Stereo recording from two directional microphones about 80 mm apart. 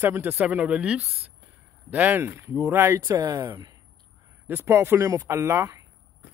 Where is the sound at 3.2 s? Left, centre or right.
Right.